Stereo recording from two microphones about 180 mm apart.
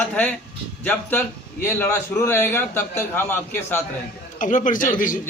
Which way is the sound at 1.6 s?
15° left (ahead or behind).